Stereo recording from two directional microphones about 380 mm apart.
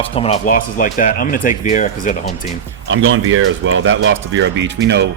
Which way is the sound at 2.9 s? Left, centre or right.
Right.